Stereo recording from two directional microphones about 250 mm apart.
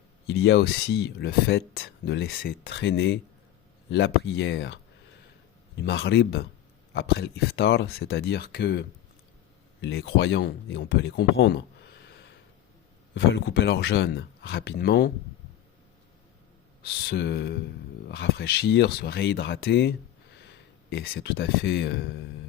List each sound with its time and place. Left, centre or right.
0.3 s speech: left
16.8 s speech: left
20.9 s speech: left